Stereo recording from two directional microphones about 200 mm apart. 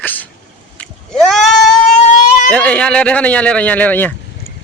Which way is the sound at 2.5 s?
5° left (ahead or behind).